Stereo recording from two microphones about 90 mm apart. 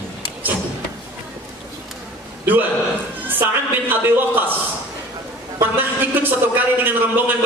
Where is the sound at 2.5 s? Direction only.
20° right (ahead or behind).